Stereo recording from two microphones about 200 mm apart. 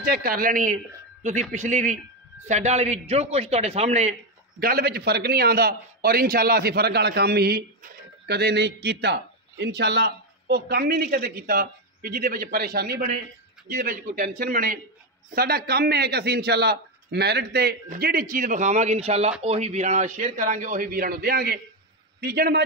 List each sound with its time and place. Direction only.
0.0 s a man's voice: 45° right (ahead or behind)